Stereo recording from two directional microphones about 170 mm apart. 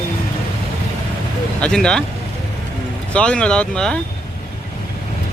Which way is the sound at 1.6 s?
5° left (ahead or behind).